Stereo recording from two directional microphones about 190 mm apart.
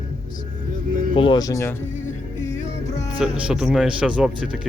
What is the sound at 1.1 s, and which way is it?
Speech, 25° left (ahead or behind).